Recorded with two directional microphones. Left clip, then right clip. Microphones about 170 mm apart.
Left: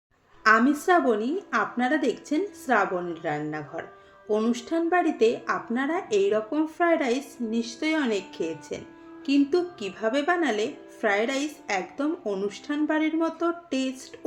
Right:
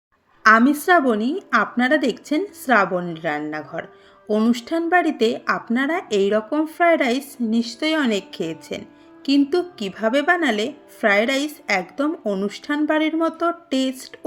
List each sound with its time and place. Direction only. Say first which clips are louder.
0.4 s speech: right 6 dB; 65° right (ahead or behind)